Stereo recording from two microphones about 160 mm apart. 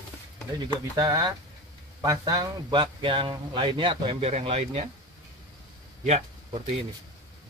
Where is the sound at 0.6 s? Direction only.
25° right (ahead or behind).